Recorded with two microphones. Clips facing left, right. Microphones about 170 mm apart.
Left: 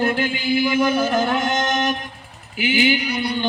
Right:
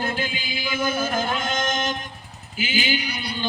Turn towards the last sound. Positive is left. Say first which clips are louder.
# left 7 dB
turn(degrees=60)  # may be behind; listen again after turning